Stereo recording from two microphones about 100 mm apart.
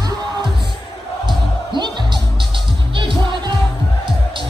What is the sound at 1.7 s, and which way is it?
Music, 50° right (ahead or behind).